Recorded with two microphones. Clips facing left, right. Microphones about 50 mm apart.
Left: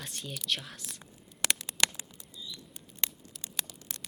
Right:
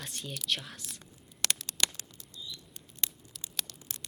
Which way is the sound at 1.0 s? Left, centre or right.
Centre.